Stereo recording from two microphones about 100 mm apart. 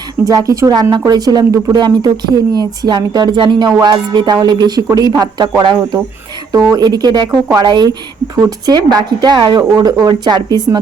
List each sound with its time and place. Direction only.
0.3 s speech: 35° right (ahead or behind)